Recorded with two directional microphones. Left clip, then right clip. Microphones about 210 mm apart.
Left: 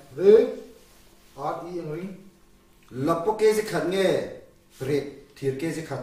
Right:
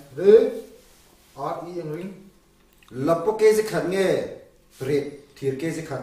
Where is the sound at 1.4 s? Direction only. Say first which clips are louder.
Right 1 dB; 15° left (ahead or behind).